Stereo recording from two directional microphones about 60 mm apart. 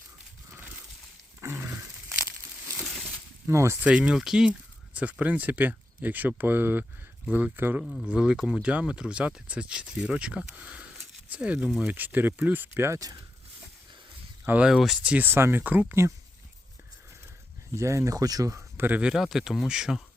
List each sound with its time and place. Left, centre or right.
0.5 s livestock: right
1.5 s dog: right
3.4 s speech: right
3.8 s speech: right
4.9 s speech: right
8.0 s speech: centre
13.0 s speech: right
14.6 s speech: centre
15.0 s speech: right
15.3 s speech: right
17.7 s speech: right
18.8 s speech: right
19.1 s speech: centre